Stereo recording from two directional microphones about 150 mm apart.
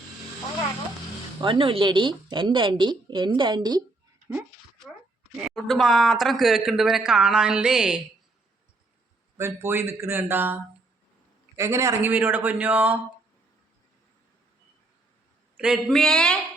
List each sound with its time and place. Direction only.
1.4 s a woman's voice: 35° right (ahead or behind)
5.4 s speech: centre (ahead or behind)
9.4 s speech: 15° right (ahead or behind)
15.5 s speech: 5° right (ahead or behind)